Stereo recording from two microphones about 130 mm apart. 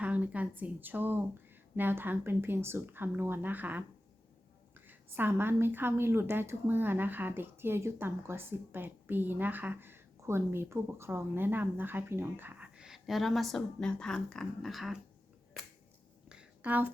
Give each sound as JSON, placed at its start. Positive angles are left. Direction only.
{"t": 0.0, "sound": "a woman's voice", "side_deg": -10}
{"t": 4.9, "sound": "a woman's voice", "side_deg": -15}
{"t": 16.3, "sound": "a sound", "side_deg": -10}